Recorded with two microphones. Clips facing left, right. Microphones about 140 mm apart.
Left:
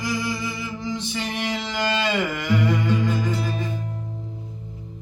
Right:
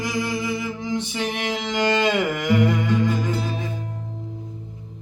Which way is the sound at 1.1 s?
60° right (ahead or behind).